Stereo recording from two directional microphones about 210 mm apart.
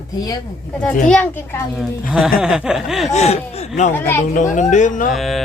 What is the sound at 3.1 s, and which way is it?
Gasp, 30° left (ahead or behind).